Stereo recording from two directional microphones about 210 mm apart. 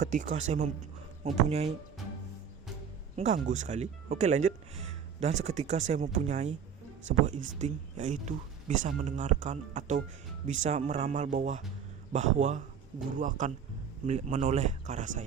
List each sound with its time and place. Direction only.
0.0 s speech: 35° right (ahead or behind)
3.2 s speech: 35° right (ahead or behind)